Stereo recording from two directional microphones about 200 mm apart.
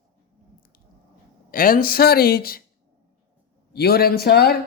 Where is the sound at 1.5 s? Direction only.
45° left (ahead or behind).